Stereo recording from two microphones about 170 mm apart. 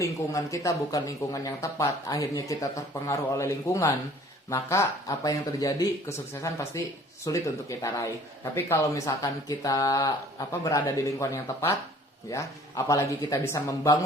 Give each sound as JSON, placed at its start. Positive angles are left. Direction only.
{"t": 0.0, "sound": "speech", "side_deg": 20}